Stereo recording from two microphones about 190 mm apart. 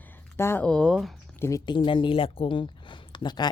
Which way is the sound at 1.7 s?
25° left (ahead or behind).